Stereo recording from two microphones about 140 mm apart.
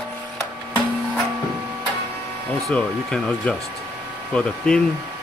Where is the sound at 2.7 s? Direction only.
5° left (ahead or behind).